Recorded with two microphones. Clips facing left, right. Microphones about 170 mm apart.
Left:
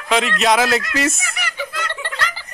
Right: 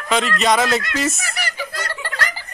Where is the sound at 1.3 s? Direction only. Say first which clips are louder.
Even; 35° right (ahead or behind).